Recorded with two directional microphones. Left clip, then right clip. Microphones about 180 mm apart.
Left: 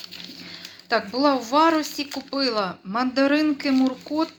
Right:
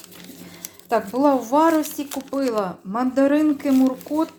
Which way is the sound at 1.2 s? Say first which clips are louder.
Right 1 dB; 20° right (ahead or behind).